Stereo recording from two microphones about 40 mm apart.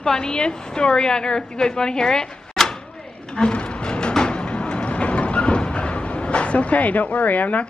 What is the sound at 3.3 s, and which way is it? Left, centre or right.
Music, left.